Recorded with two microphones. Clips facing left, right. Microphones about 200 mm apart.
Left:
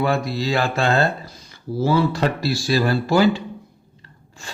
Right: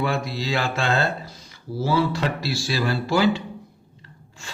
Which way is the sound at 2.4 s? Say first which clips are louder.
Left 5 dB; 45° left (ahead or behind).